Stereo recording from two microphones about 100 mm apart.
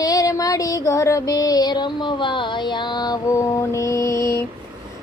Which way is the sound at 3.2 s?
30° left (ahead or behind).